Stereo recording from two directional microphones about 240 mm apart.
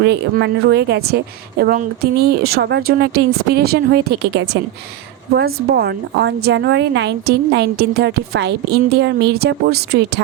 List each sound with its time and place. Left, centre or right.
0.0 s a woman's voice: right